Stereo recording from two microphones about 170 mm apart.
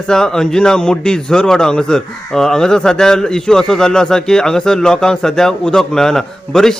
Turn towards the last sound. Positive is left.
turn(degrees=0)  # may be behind; listen again after turning